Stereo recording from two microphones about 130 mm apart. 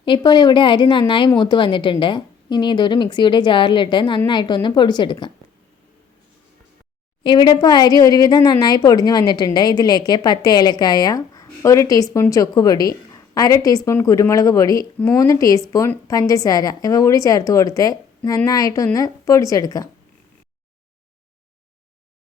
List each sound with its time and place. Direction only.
0.0 s a woman's voice: 35° left (ahead or behind)
7.3 s a woman's voice: 35° left (ahead or behind)